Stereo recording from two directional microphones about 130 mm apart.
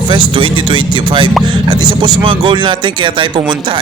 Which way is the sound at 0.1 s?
40° right (ahead or behind).